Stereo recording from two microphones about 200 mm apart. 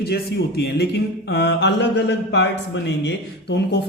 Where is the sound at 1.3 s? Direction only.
60° left (ahead or behind).